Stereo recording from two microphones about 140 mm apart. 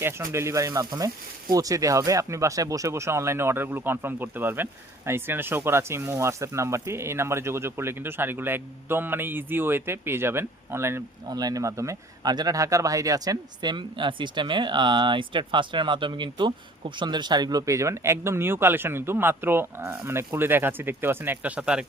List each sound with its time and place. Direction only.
0.0 s speech: 15° right (ahead or behind)